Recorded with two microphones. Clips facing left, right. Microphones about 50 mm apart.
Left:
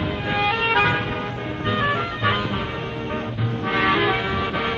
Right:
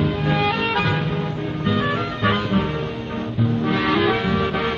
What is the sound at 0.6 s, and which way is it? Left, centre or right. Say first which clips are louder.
Music: left 2 dB; left.